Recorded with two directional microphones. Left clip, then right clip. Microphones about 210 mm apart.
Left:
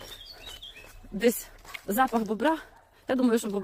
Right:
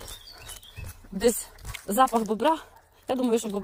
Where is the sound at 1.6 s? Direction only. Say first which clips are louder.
Left 1 dB; 50° right (ahead or behind).